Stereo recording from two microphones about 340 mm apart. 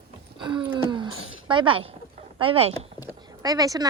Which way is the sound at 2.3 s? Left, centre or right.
Centre.